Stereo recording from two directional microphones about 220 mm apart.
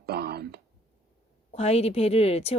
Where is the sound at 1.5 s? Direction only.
30° left (ahead or behind).